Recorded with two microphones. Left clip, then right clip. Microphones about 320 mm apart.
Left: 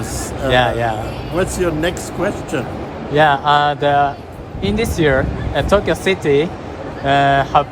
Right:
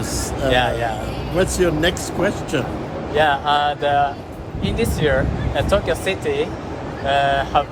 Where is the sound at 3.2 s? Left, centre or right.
Centre.